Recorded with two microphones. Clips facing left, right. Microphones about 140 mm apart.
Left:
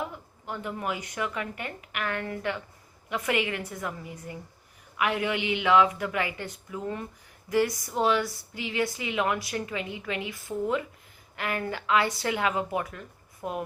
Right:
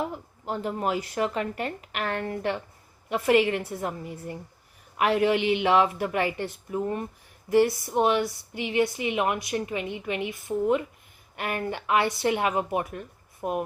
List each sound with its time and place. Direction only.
0.4 s a woman's voice: 30° right (ahead or behind)